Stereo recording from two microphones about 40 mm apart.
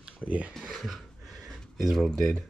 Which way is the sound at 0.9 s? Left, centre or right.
Centre.